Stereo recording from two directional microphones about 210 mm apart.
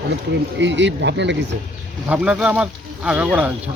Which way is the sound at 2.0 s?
5° right (ahead or behind).